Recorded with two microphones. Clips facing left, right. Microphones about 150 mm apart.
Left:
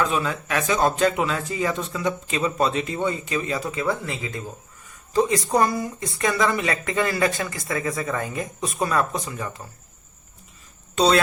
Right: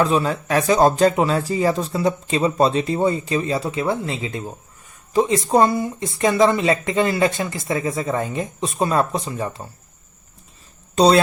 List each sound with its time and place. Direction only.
0.0 s speech: 35° right (ahead or behind)
10.9 s speech: 35° right (ahead or behind)